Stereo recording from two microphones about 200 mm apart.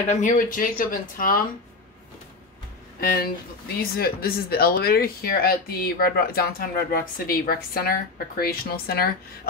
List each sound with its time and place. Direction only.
0.1 s speech: 40° left (ahead or behind)
3.0 s speech: 45° left (ahead or behind)